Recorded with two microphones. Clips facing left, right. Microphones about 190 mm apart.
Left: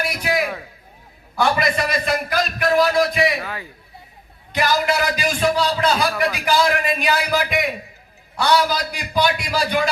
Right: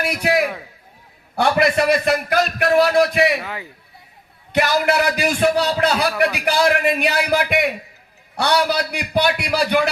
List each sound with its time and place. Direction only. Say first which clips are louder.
0.2 s a man's voice: right 4 dB; 60° right (ahead or behind)
3.4 s a man's voice: even; 20° right (ahead or behind)
4.5 s a man's voice: right 2 dB; 60° right (ahead or behind)